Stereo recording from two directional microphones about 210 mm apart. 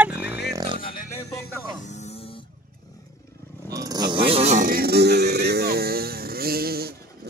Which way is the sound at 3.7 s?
15° right (ahead or behind).